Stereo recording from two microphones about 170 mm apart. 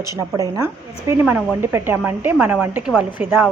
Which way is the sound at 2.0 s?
Centre (ahead or behind).